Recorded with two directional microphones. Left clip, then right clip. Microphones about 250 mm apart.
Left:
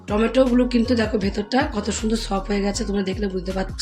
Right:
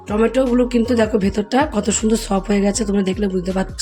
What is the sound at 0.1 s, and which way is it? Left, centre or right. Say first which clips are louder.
Speech: right 2 dB; right.